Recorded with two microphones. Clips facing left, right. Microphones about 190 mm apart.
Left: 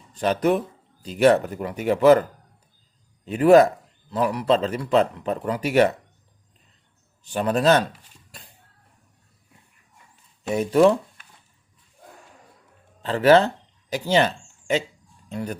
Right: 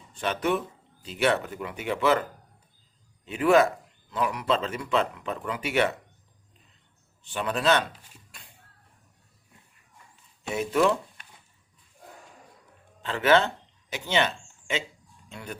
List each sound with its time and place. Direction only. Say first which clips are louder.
0.1 s speech: left 6 dB; 40° left (ahead or behind)
3.2 s speech: left 6 dB; 40° left (ahead or behind)
7.3 s speech: left 6 dB; 40° left (ahead or behind)
8.3 s a sound: left 9 dB; 35° left (ahead or behind)
10.5 s speech: left 7 dB; 35° left (ahead or behind)
13.0 s speech: left 6 dB; 35° left (ahead or behind)